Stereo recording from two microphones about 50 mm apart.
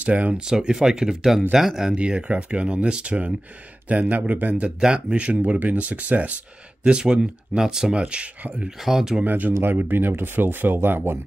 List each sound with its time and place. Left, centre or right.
0.0 s speech: right
0.5 s speech: centre
2.0 s speech: right
4.6 s speech: centre
6.8 s speech: centre
8.0 s speech: right
8.6 s speech: centre
9.2 s speech: right